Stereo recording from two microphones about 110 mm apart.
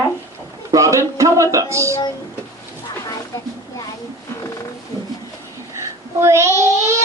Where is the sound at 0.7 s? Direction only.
30° right (ahead or behind).